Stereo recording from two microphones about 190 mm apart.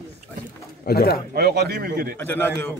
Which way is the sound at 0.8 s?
55° left (ahead or behind).